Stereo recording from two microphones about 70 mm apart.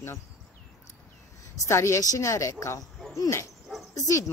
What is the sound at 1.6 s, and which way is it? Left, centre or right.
Speech, left.